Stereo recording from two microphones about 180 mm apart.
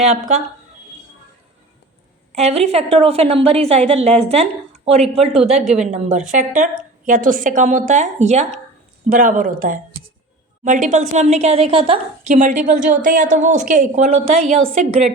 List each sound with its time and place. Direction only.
0.0 s a woman's voice: 40° right (ahead or behind)
2.3 s a woman's voice: 35° right (ahead or behind)
5.5 s a woman's voice: 5° right (ahead or behind)
5.9 s a woman's voice: 40° right (ahead or behind)